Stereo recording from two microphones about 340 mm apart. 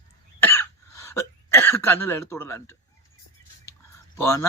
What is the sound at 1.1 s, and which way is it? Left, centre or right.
Speech, centre.